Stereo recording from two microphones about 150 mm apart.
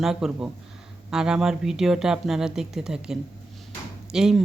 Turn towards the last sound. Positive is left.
turn(degrees=-5)  # may be behind; listen again after turning